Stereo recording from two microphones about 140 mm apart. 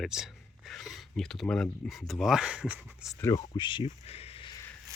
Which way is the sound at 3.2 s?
25° left (ahead or behind).